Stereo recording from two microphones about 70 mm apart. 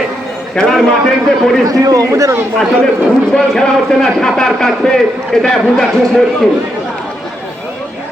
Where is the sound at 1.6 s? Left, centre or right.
Right.